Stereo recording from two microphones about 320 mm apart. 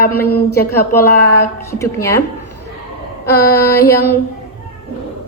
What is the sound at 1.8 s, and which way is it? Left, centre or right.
Speech, centre.